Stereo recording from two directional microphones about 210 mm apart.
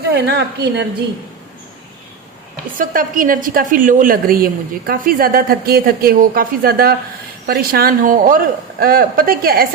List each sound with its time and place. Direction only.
0.1 s a woman's voice: 55° right (ahead or behind)
2.7 s a woman's voice: 40° right (ahead or behind)